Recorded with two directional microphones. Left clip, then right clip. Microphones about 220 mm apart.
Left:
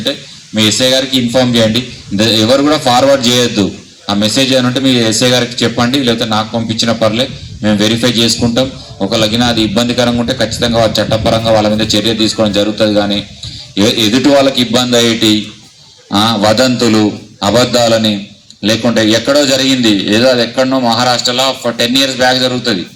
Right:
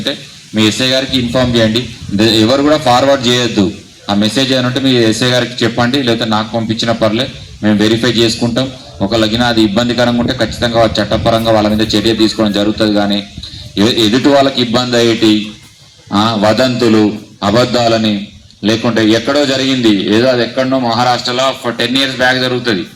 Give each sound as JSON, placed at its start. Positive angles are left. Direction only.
{"t": 0.0, "sound": "a man's voice", "side_deg": 50}